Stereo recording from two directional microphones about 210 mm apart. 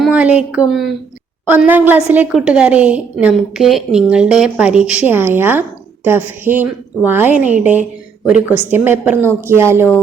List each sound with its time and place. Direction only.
0.0 s a woman's voice: 5° right (ahead or behind)